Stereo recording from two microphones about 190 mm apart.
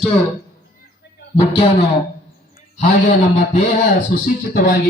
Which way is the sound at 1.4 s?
30° left (ahead or behind).